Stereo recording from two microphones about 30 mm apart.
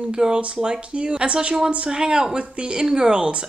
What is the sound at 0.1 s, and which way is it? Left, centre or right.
Speech, right.